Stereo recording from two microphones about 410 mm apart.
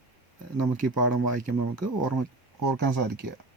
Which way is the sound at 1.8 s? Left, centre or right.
Right.